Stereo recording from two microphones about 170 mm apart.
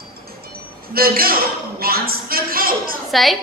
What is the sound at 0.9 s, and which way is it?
A woman's voice, 60° right (ahead or behind).